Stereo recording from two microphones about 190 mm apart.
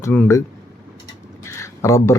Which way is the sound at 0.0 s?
10° left (ahead or behind).